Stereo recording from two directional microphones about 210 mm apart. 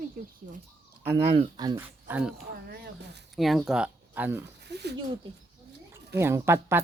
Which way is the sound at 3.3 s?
Centre (ahead or behind).